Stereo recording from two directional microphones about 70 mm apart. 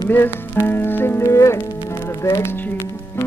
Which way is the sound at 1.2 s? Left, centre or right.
Left.